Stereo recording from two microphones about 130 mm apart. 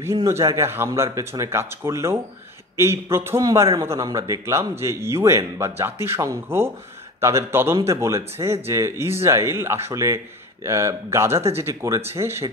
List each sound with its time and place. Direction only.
0.0 s speech: 20° right (ahead or behind)